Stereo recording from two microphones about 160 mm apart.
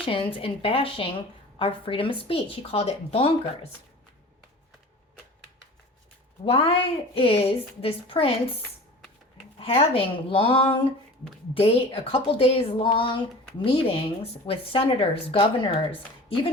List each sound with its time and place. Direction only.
0.0 s a woman's voice: 35° left (ahead or behind)
6.4 s a woman's voice: 35° left (ahead or behind)
9.6 s a woman's voice: 35° left (ahead or behind)